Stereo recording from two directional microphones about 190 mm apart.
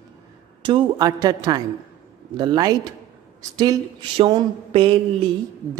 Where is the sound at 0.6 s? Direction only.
20° right (ahead or behind).